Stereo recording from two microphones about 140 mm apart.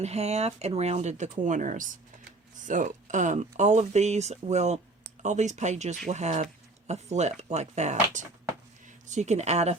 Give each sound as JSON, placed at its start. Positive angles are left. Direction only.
{"t": 0.0, "sound": "speech", "side_deg": -50}